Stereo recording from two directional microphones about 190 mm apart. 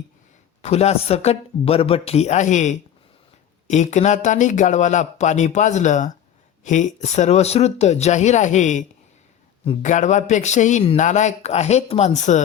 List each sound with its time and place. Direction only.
0.6 s a man's voice: 35° left (ahead or behind)